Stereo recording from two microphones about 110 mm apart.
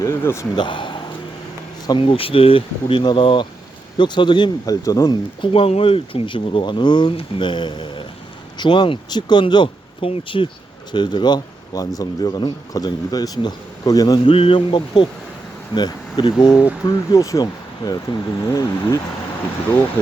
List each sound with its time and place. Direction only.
0.0 s a man's voice: 25° left (ahead or behind)
0.5 s speech: 45° left (ahead or behind)
2.0 s speech: 55° left (ahead or behind); by 5.1 s 35° left (ahead or behind)
5.4 s speech: 55° left (ahead or behind); by 14.3 s 35° left (ahead or behind)
14.3 s speech: 55° left (ahead or behind)
17.1 s speech: 30° left (ahead or behind)